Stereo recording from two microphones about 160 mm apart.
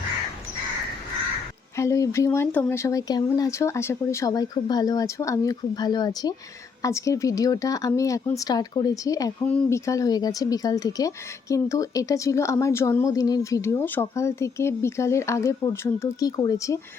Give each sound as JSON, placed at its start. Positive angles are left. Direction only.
{"t": 1.7, "sound": "speech", "side_deg": 20}